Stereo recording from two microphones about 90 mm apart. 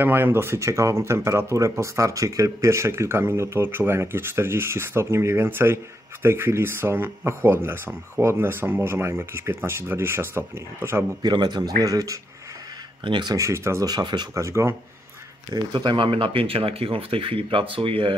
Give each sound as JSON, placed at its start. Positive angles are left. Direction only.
{"t": 0.0, "sound": "speech", "side_deg": -25}
{"t": 11.2, "sound": "a man's voice", "side_deg": -55}
{"t": 13.0, "sound": "speech", "side_deg": -65}
{"t": 13.3, "sound": "speech", "side_deg": -35}
{"t": 13.8, "sound": "a man's voice", "side_deg": -50}
{"t": 14.3, "sound": "speech", "side_deg": -35}
{"t": 15.5, "sound": "speech", "side_deg": -55}